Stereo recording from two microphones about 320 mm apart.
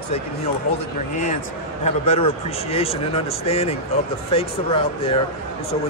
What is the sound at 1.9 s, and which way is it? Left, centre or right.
A man's voice, centre.